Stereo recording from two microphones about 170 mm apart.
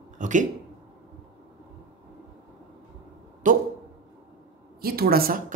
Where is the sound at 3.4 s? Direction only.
50° right (ahead or behind).